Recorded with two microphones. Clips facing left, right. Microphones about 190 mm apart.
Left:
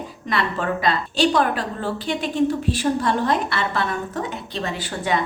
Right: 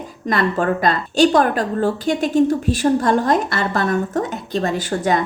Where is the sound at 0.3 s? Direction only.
45° right (ahead or behind).